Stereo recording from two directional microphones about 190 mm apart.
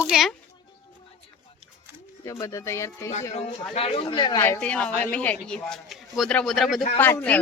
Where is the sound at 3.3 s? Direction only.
30° left (ahead or behind).